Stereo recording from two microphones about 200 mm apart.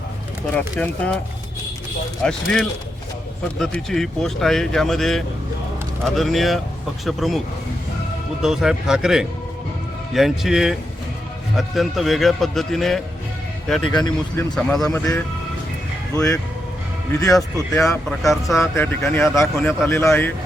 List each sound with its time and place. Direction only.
0.8 s speech: 5° left (ahead or behind)
2.2 s speech: 5° left (ahead or behind)
8.4 s speech: 5° right (ahead or behind)
13.9 s speech: 20° left (ahead or behind)
14.5 s speech: centre (ahead or behind)
16.1 s speech: 15° left (ahead or behind)
17.8 s speech: 5° left (ahead or behind)
18.6 s speech: 10° left (ahead or behind)